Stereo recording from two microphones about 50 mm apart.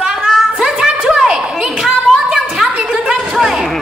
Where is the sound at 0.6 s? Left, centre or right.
Centre.